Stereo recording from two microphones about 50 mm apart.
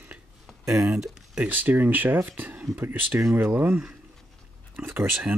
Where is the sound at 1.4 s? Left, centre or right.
Right.